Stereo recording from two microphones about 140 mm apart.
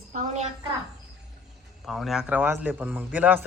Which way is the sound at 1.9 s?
Centre (ahead or behind).